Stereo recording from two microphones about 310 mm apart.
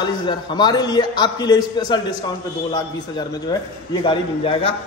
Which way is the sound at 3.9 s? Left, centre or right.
Centre.